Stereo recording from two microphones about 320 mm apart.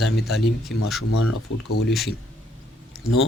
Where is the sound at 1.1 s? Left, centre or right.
Left.